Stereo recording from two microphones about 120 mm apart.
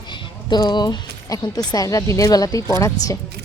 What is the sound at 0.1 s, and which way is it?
Speech, 35° left (ahead or behind).